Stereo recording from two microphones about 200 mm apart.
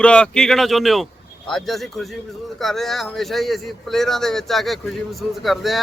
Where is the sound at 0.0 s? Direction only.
5° left (ahead or behind).